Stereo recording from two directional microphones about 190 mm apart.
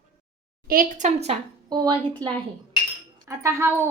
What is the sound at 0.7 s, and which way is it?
Speech, 45° right (ahead or behind).